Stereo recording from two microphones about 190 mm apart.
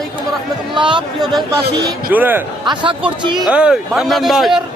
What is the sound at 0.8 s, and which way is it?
Speech, 25° right (ahead or behind).